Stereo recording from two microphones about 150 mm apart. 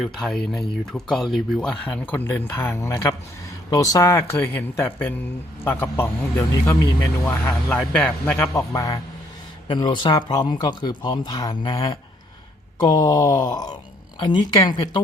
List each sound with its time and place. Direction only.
0.0 s speech: centre (ahead or behind); by 14.8 s 25° left (ahead or behind)